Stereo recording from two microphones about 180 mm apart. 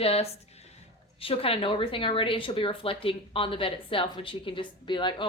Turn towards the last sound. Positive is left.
turn(degrees=25)  # may be behind; listen again after turning